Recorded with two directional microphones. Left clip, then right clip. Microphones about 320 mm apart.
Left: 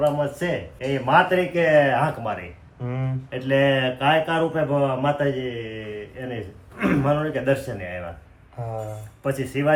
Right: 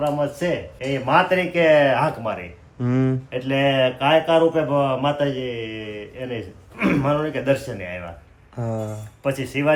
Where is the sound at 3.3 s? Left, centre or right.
Centre.